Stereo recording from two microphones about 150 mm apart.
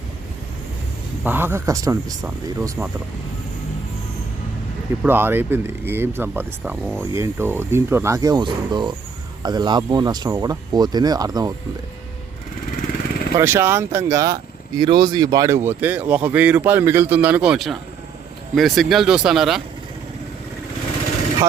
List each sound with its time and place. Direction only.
1.2 s speech: 15° right (ahead or behind)
5.0 s speech: 15° right (ahead or behind)
12.7 s vehicle: 70° left (ahead or behind)
13.3 s speech: 15° right (ahead or behind)